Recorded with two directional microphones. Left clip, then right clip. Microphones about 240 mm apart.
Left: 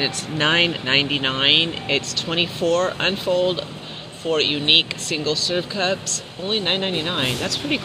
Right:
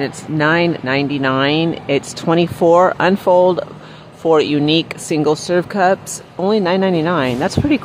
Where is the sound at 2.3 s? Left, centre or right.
Right.